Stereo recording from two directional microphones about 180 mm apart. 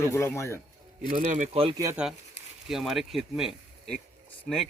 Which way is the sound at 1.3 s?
35° right (ahead or behind).